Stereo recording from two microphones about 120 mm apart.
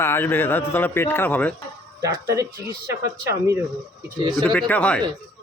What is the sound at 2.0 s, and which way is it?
Speech, 25° right (ahead or behind).